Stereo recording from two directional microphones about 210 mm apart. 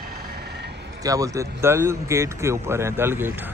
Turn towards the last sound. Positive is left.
turn(degrees=-10)  # may be behind; listen again after turning